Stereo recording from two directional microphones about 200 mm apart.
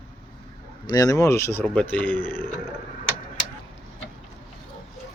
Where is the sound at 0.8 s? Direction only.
20° left (ahead or behind).